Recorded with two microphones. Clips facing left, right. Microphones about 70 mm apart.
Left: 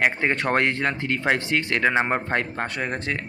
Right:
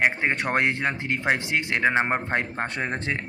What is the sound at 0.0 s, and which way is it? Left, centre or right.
Speech, centre.